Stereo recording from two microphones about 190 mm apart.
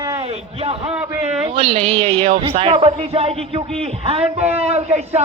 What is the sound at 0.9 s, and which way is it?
Speech, 5° right (ahead or behind).